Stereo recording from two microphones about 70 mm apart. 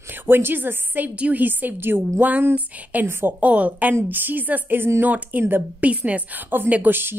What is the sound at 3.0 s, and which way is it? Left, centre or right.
Speech, right.